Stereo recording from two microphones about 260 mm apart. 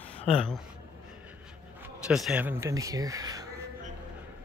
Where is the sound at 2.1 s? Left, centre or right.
Centre.